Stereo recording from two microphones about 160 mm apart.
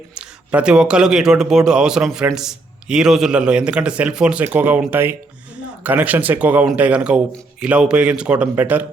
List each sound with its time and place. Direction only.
0.1 s a man's voice: 5° right (ahead or behind)